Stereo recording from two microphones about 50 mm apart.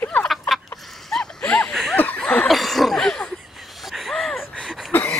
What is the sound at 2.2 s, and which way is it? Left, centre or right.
Snicker, left.